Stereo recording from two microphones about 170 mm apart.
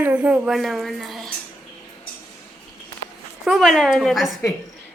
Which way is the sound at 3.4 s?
Centre (ahead or behind).